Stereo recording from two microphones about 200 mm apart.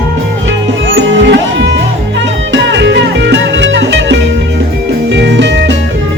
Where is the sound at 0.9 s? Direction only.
65° right (ahead or behind).